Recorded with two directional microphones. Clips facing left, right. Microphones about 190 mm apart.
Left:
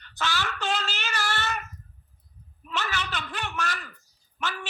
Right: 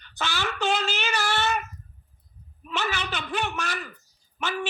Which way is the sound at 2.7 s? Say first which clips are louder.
Right 2 dB; 55° right (ahead or behind).